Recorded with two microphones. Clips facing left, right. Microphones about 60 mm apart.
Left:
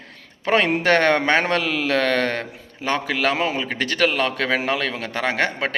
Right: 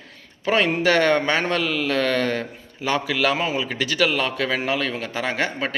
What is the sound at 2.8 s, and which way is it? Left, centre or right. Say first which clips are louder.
Speech: even; left.